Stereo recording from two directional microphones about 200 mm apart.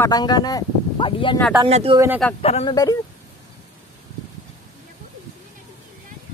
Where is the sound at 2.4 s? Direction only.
30° left (ahead or behind).